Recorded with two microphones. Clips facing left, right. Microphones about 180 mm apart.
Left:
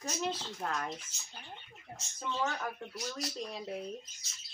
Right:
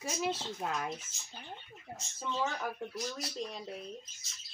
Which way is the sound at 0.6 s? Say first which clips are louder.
Right 1 dB; 10° right (ahead or behind).